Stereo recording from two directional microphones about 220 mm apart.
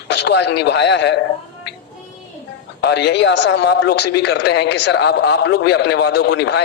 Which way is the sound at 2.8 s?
50° left (ahead or behind).